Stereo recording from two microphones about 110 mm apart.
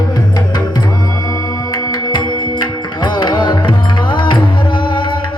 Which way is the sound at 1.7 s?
40° left (ahead or behind).